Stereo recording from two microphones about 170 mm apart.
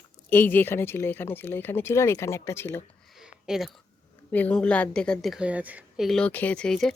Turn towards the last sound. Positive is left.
turn(degrees=5)  # may be behind; listen again after turning